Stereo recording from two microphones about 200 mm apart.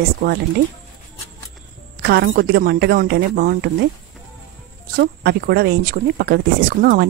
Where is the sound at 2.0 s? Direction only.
50° right (ahead or behind).